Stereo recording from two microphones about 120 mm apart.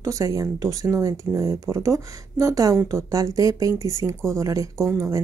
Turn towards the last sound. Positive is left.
turn(degrees=-25)  # may be behind; listen again after turning